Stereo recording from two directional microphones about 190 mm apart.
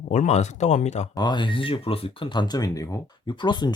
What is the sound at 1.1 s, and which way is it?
Speech, 20° left (ahead or behind).